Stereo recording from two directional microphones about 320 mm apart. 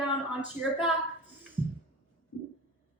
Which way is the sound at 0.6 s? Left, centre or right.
Left.